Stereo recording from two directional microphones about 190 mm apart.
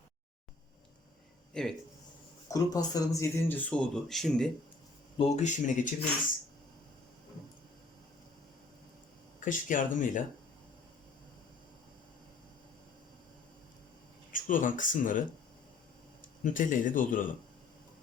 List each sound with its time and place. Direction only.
1.5 s speech: 5° left (ahead or behind)
2.5 s speech: 20° left (ahead or behind); by 4.5 s centre (ahead or behind)
5.1 s speech: 35° left (ahead or behind)
9.4 s speech: 45° left (ahead or behind)
14.3 s speech: 45° left (ahead or behind)
16.4 s speech: 45° left (ahead or behind)